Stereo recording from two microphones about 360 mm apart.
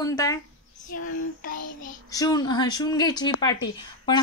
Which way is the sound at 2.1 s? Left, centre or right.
Centre.